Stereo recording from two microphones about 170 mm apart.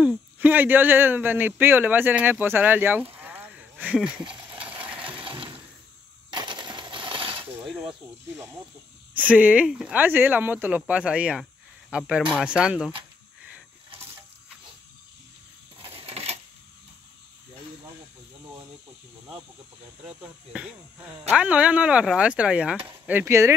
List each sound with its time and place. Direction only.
0.0 s speech: 5° right (ahead or behind)
4.3 s a sound: 10° right (ahead or behind)
5.2 s a sound: 30° right (ahead or behind)
6.3 s coin: 25° right (ahead or behind)
7.6 s cricket: centre (ahead or behind)
9.1 s speech: 10° right (ahead or behind)
15.8 s coin: 35° right (ahead or behind)
20.1 s speech: 5° right (ahead or behind)